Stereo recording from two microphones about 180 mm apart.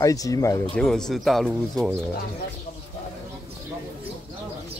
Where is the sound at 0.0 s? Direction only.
20° left (ahead or behind).